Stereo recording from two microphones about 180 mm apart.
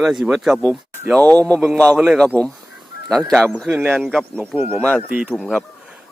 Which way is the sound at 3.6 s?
15° right (ahead or behind).